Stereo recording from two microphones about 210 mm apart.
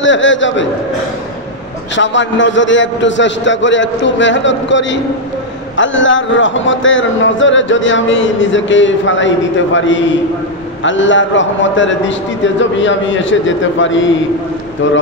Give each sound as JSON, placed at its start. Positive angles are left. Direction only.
{"t": 0.0, "sound": "a man's voice", "side_deg": 65}
{"t": 2.0, "sound": "a man's voice", "side_deg": 60}